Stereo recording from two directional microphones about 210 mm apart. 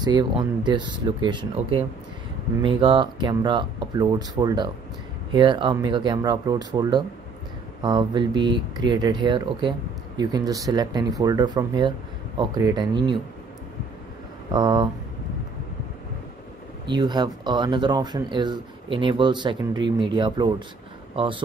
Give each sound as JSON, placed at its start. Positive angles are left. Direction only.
{"t": 0.0, "sound": "speech", "side_deg": -20}
{"t": 14.5, "sound": "speech", "side_deg": -20}
{"t": 16.9, "sound": "speech", "side_deg": -20}